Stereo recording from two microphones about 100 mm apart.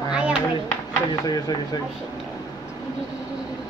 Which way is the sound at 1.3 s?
40° left (ahead or behind).